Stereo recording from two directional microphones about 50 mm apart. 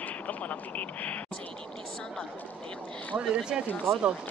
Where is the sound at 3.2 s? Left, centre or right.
Centre.